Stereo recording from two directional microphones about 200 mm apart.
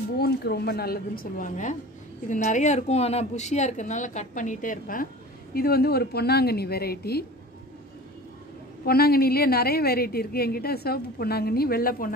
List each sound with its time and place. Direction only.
0.2 s a woman's voice: 55° left (ahead or behind)
8.8 s a woman's voice: 50° left (ahead or behind)